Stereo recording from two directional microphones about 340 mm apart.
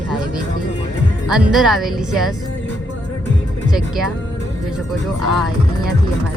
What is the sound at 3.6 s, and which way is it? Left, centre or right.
Speech, centre.